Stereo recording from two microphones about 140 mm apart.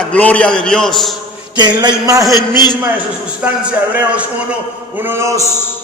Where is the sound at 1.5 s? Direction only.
30° right (ahead or behind).